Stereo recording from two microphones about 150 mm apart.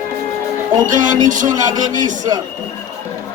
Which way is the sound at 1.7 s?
25° right (ahead or behind).